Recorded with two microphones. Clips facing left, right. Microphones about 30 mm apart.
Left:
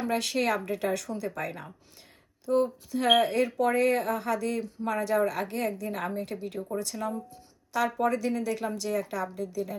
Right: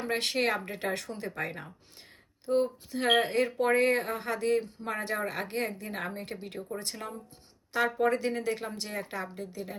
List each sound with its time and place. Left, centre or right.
0.0 s speech: right